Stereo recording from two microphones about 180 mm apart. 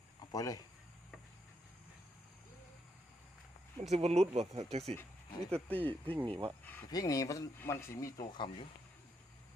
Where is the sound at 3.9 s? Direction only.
35° right (ahead or behind).